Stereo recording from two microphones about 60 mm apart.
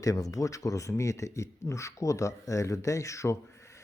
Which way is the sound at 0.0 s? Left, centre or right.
Left.